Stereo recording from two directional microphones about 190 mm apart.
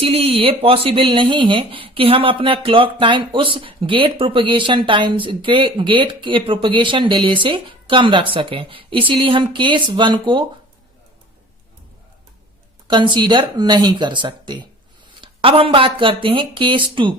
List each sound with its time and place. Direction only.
0.0 s speech: 30° right (ahead or behind)
12.9 s speech: 25° right (ahead or behind)